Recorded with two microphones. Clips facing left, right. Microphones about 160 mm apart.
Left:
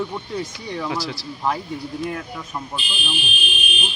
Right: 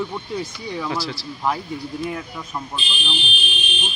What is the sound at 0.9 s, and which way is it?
Speech, 20° left (ahead or behind).